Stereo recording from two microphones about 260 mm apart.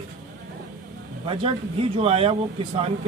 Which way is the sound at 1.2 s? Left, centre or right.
Right.